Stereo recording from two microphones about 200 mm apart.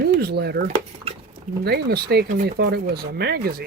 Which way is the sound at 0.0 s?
50° right (ahead or behind).